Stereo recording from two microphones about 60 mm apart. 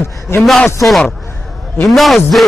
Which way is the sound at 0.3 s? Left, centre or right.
Left.